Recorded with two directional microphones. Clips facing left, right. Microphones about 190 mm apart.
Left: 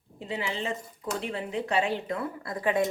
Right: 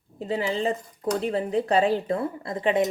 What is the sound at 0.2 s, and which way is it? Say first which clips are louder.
A woman's voice: right 7 dB; 40° right (ahead or behind).